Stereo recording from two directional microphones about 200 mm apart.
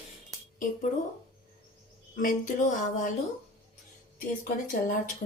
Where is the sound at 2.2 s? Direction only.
40° left (ahead or behind).